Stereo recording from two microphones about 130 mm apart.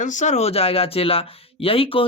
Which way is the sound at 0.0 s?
70° left (ahead or behind).